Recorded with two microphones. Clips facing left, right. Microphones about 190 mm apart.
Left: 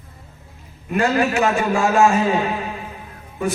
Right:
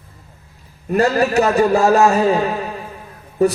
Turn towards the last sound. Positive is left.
turn(degrees=-40)  # may be behind; listen again after turning